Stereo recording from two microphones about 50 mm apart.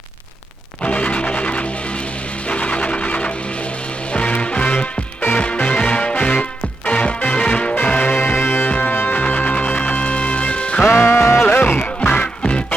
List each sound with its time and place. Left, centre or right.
0.8 s music: left
7.8 s music: left
10.8 s music: left
11.6 s music: left
11.9 s music: left